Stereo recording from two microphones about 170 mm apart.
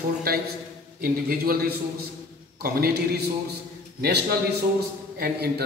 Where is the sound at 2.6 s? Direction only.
65° right (ahead or behind).